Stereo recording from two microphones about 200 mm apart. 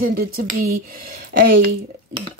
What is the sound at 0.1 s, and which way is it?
Speech, 50° right (ahead or behind).